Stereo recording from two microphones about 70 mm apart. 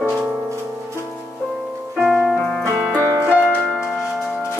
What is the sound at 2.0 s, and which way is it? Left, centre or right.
Music, centre.